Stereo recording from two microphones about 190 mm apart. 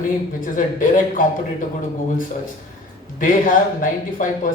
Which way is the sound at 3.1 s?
45° left (ahead or behind).